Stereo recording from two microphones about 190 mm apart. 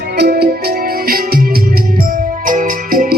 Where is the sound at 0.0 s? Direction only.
55° right (ahead or behind).